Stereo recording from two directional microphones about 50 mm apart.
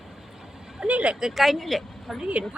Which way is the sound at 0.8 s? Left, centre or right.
Right.